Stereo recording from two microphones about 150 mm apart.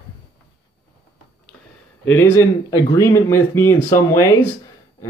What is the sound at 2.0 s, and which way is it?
Speech, 15° left (ahead or behind).